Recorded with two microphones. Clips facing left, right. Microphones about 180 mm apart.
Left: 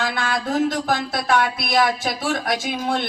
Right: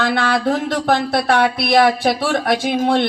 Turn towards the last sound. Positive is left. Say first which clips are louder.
# right 7 dB
turn(degrees=-60)  # may be behind; listen again after turning